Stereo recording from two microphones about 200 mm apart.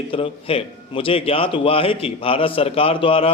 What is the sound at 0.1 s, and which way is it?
Speech, 30° left (ahead or behind).